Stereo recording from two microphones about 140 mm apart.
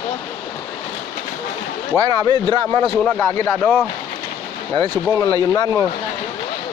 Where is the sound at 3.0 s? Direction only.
15° left (ahead or behind).